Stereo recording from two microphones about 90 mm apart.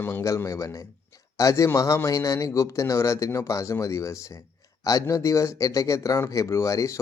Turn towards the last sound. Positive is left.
turn(degrees=35)  # may be behind; listen again after turning